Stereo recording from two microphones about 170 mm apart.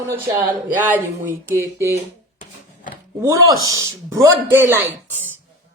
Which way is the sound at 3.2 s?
20° right (ahead or behind).